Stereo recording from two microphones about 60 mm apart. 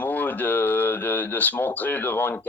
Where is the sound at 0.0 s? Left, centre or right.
Left.